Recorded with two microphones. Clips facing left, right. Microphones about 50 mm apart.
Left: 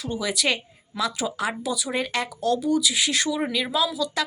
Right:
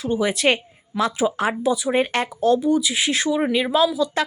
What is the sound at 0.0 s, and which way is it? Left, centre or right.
A woman's voice, right.